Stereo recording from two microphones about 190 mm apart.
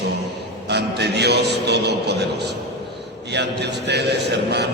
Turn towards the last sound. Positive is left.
turn(degrees=-60)  # may be behind; listen again after turning